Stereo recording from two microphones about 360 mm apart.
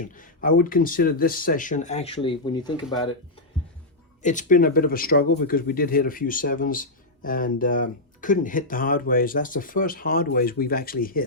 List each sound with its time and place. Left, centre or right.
0.0 s speech: left
4.2 s speech: left